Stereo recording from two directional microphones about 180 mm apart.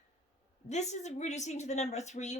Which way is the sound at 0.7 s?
40° left (ahead or behind).